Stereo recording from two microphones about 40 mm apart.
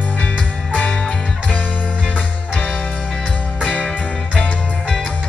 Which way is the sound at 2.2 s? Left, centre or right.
Left.